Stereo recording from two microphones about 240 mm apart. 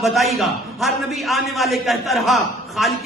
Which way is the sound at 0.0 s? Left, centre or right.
Centre.